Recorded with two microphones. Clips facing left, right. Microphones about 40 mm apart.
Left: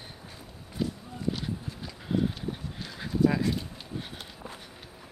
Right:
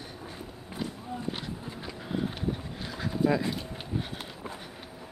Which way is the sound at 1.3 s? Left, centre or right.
Right.